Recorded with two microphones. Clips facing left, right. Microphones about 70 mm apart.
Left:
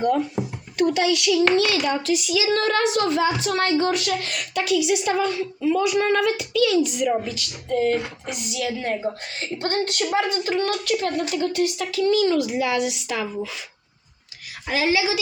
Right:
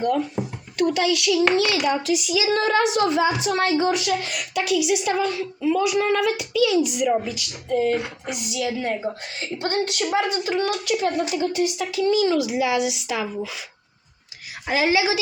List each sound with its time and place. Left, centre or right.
0.1 s a child's voice: centre
14.7 s a woman's voice: right